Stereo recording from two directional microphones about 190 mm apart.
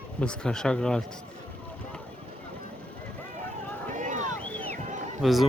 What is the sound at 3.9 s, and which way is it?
Boat, 40° right (ahead or behind).